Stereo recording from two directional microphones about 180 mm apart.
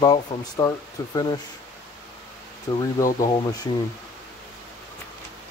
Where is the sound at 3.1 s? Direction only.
45° left (ahead or behind).